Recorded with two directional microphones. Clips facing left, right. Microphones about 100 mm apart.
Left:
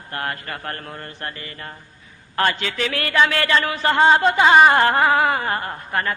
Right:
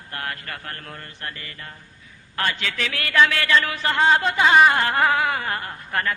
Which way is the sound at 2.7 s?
30° left (ahead or behind).